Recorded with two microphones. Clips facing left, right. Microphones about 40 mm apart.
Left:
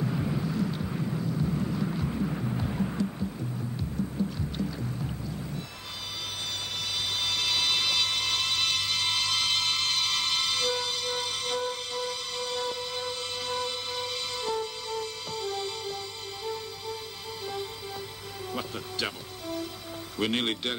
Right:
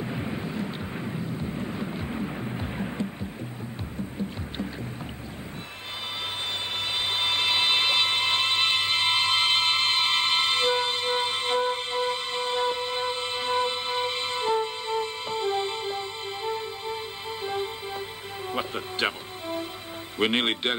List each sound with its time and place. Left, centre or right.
0.0 s vehicle: right
2.0 s a sound: right
3.9 s boat: right
7.1 s a sound: right
18.5 s music: right
20.2 s speech: right